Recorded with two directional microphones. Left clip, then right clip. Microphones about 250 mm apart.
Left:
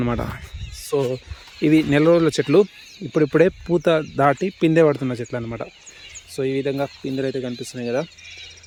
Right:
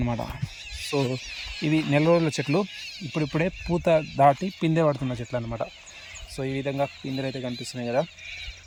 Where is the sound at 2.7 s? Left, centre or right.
Right.